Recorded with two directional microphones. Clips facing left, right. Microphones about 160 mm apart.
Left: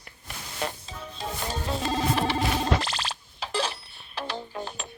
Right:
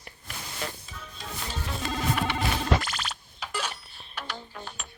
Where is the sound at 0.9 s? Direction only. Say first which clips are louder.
Left 6 dB; 25° left (ahead or behind).